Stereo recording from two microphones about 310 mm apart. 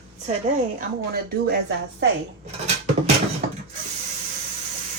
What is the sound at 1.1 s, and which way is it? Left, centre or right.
Speech, right.